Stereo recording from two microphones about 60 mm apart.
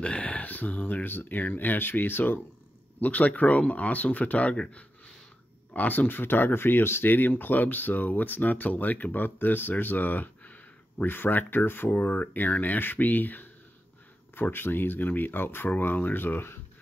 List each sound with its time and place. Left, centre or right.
0.0 s speech: centre; by 2.4 s left
3.0 s speech: left